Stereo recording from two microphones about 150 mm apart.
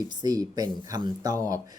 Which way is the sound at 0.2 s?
25° right (ahead or behind).